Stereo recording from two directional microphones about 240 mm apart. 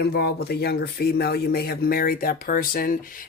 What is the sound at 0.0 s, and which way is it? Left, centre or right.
Speech, left.